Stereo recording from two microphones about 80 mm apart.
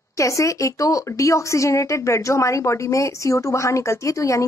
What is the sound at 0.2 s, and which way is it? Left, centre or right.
A woman's voice, left.